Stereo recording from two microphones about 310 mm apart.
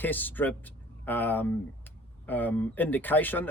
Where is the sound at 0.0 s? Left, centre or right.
Centre.